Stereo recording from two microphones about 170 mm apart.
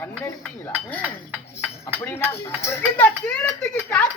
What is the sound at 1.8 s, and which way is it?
Speech, 10° left (ahead or behind).